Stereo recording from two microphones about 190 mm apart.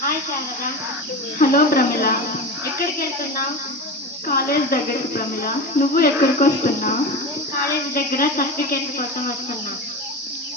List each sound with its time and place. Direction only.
1.4 s speech: 50° left (ahead or behind)
4.3 s speech: 50° left (ahead or behind)
7.9 s speech: 50° left (ahead or behind)